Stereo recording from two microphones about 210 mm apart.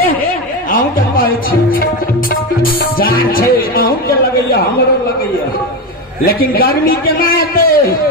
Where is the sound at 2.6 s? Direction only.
45° left (ahead or behind).